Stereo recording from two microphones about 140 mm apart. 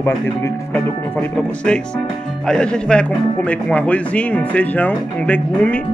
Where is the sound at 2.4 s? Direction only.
5° left (ahead or behind).